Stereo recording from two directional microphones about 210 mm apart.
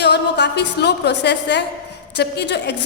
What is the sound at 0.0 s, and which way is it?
A woman's voice, 55° left (ahead or behind).